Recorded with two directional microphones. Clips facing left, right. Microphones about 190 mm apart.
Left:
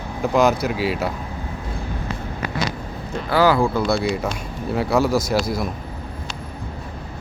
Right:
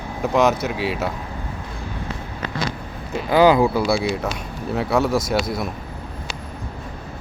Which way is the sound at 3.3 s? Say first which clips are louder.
Right 3 dB; 20° right (ahead or behind).